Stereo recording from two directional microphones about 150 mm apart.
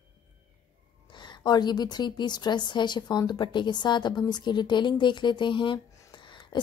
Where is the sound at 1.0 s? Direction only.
30° left (ahead or behind).